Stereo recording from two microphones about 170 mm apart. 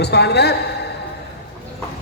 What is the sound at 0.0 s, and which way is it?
Speech, 75° left (ahead or behind).